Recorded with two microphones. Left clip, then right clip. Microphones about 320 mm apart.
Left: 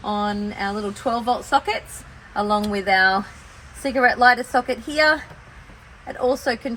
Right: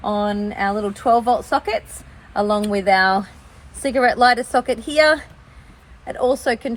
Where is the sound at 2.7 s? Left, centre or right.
Right.